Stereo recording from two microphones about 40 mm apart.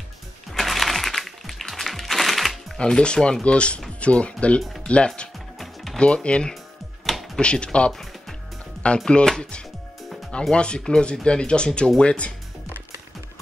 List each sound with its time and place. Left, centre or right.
0.5 s music: centre
2.8 s speech: left
7.9 s music: centre
8.8 s speech: left